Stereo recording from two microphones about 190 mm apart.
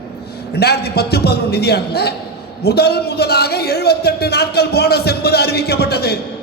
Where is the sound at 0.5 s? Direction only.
55° left (ahead or behind).